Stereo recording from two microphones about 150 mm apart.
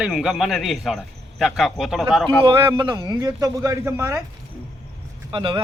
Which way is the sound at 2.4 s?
35° right (ahead or behind).